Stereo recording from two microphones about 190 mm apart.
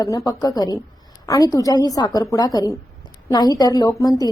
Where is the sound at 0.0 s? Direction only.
20° left (ahead or behind).